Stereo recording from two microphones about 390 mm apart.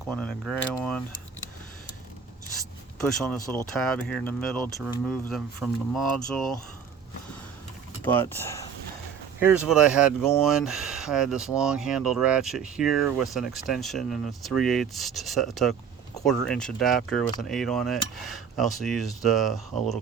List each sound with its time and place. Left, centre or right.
0.1 s speech: centre
3.0 s speech: centre
8.0 s speech: centre
19.7 s speech: centre